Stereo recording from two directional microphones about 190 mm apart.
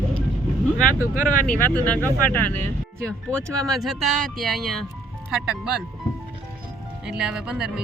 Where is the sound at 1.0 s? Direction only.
10° right (ahead or behind).